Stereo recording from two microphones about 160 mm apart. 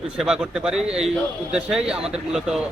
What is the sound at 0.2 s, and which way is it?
A man's voice, 5° right (ahead or behind).